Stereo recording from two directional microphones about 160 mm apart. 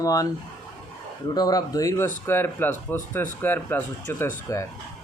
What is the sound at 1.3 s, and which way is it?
Speech, 25° left (ahead or behind).